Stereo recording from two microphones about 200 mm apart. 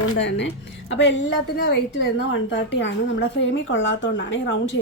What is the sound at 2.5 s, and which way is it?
A woman's voice, 65° left (ahead or behind).